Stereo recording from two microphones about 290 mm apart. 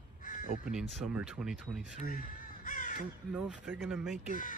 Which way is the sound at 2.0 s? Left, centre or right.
Left.